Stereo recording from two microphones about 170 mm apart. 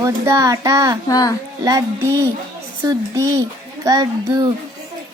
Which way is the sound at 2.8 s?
20° right (ahead or behind).